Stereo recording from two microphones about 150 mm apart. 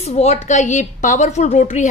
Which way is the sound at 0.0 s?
45° left (ahead or behind).